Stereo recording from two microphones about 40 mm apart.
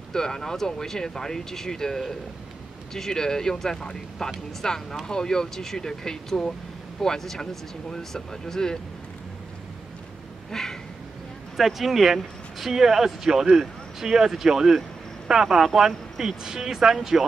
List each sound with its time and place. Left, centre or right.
0.1 s speech: centre
10.5 s a sound: centre
11.5 s speech: centre